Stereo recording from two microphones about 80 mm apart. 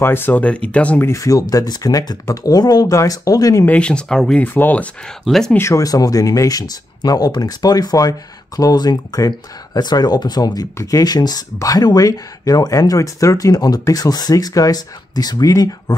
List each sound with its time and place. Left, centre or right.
0.0 s speech: left
1.0 s speech: left
2.9 s speech: left
3.6 s speech: centre
4.4 s speech: left
5.0 s speech: centre
5.6 s speech: left